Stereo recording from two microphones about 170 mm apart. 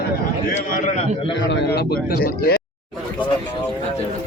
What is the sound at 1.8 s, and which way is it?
Speech, 65° left (ahead or behind).